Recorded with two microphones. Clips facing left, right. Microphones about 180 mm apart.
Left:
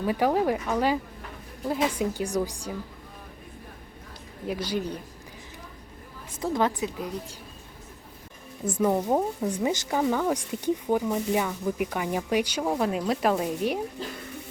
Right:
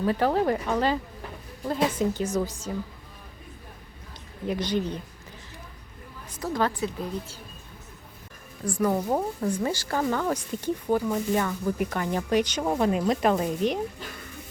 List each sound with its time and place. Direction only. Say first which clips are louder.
0.0 s speech: even; 10° left (ahead or behind)
4.4 s speech: right 2 dB; 5° left (ahead or behind)
6.3 s a woman's voice: left 1 dB; 25° left (ahead or behind)
8.6 s a woman's voice: left 1 dB; 20° left (ahead or behind); by 13.8 s 5° left (ahead or behind)